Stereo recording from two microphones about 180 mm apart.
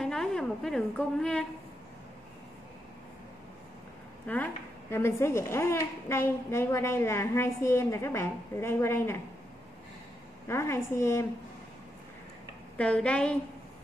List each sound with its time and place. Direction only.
0.0 s a woman's voice: centre (ahead or behind)
4.3 s speech: 10° left (ahead or behind)
10.5 s speech: 15° left (ahead or behind)
12.7 s speech: 5° left (ahead or behind)